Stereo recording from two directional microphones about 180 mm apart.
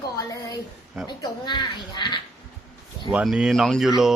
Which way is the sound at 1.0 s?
25° left (ahead or behind).